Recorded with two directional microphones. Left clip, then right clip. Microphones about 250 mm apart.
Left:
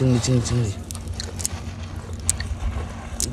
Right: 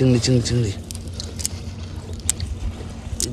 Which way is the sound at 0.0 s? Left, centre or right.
Centre.